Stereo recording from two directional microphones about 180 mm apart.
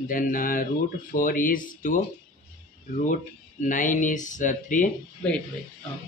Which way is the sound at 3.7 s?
45° left (ahead or behind).